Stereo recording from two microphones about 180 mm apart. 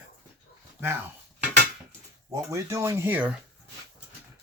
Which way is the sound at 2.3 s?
15° right (ahead or behind).